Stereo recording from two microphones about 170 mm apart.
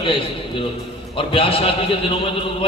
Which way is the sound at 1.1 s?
30° left (ahead or behind).